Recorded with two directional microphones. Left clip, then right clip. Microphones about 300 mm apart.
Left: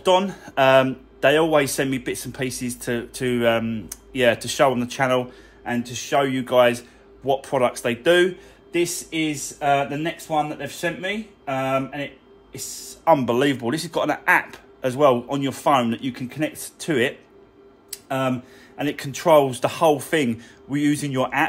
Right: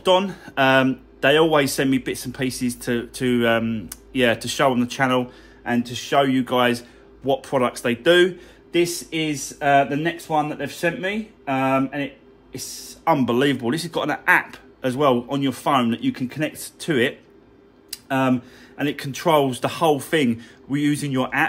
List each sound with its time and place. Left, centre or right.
0.0 s speech: centre